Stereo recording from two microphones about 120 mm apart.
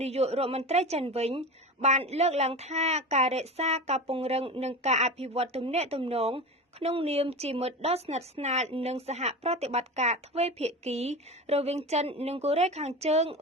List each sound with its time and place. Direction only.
0.0 s a woman's voice: 60° right (ahead or behind)
4.8 s a woman's voice: 70° right (ahead or behind)